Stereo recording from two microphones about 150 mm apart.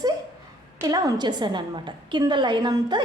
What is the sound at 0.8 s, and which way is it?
A woman's voice, 25° right (ahead or behind).